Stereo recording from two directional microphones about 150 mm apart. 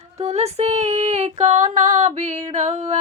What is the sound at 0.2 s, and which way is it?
Female singing, 45° right (ahead or behind).